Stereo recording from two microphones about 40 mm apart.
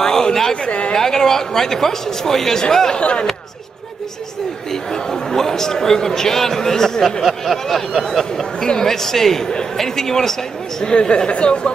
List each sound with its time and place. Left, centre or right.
0.0 s a sound: centre
0.7 s speech: left
0.9 s a man's voice: centre
3.0 s speech: left
4.9 s a man's voice: centre
10.8 s speech: left